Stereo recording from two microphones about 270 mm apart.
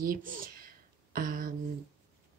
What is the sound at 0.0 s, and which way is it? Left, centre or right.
Speech, right.